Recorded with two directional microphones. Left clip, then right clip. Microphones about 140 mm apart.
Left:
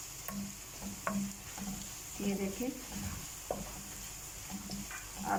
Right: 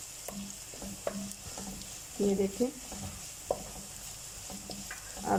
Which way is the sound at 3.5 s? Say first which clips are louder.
Right 6 dB; 10° right (ahead or behind).